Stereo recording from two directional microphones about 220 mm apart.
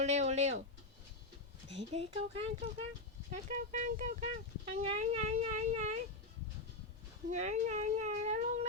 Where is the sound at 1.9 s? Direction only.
25° right (ahead or behind).